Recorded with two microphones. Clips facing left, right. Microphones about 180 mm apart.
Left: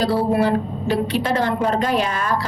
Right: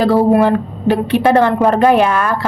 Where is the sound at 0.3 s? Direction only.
50° right (ahead or behind).